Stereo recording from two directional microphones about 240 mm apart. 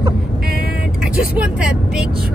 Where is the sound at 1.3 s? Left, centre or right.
Centre.